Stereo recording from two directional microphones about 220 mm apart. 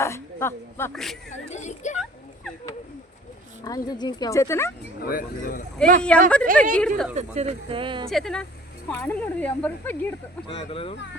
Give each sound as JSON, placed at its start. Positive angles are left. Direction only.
{"t": 0.0, "sound": "speech", "side_deg": 10}
{"t": 1.3, "sound": "speech", "side_deg": 30}
{"t": 3.6, "sound": "speech", "side_deg": 15}
{"t": 4.9, "sound": "speech", "side_deg": 40}
{"t": 6.0, "sound": "speech", "side_deg": 5}
{"t": 7.2, "sound": "speech", "side_deg": -30}
{"t": 8.1, "sound": "speech", "side_deg": 0}
{"t": 10.5, "sound": "speech", "side_deg": 25}